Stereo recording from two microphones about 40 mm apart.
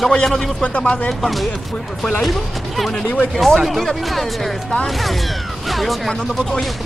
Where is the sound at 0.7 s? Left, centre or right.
Left.